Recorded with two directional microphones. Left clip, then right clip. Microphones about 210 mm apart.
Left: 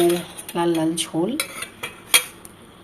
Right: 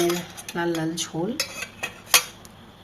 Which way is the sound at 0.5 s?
5° left (ahead or behind).